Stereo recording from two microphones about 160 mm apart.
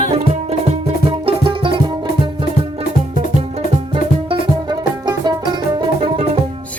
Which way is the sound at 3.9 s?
30° right (ahead or behind).